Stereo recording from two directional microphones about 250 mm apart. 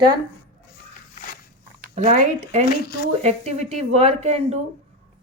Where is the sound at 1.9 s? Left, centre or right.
Right.